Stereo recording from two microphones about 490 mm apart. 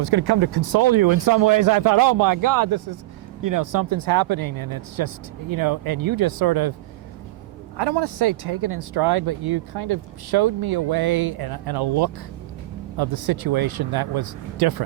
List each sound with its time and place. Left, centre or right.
0.0 s speech: right
7.8 s speech: right